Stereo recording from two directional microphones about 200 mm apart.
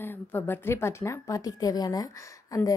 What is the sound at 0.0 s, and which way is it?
A woman's voice, 10° left (ahead or behind).